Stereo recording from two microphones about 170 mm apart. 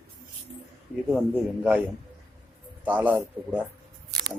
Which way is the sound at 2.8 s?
10° right (ahead or behind).